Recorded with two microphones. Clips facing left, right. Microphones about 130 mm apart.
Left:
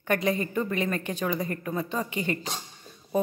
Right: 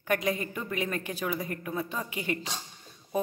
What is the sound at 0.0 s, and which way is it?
Speech, 5° right (ahead or behind).